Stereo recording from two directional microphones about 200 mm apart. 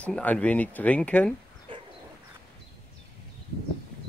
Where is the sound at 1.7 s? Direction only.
25° right (ahead or behind).